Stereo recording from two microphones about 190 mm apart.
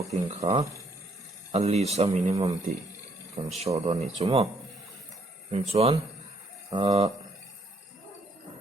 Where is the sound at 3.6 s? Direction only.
35° right (ahead or behind).